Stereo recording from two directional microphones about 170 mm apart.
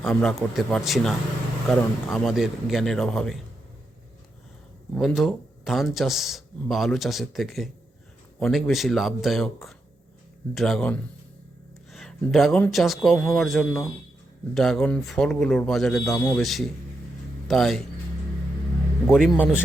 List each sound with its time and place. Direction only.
0.0 s speech: 5° left (ahead or behind)
4.9 s speech: centre (ahead or behind)
19.0 s speech: 5° right (ahead or behind)